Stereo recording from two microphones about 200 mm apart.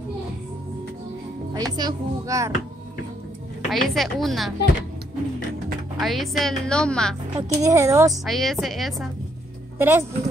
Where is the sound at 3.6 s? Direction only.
Centre (ahead or behind).